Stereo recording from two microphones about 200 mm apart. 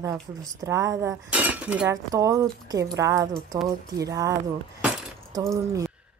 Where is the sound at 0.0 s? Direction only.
15° right (ahead or behind).